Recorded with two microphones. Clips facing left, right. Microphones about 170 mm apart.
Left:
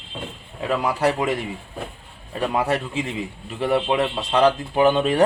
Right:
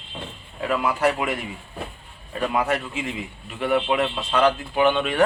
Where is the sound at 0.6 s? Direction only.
30° left (ahead or behind).